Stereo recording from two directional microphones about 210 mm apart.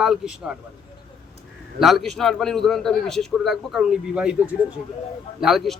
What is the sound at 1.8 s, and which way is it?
Speech, centre (ahead or behind).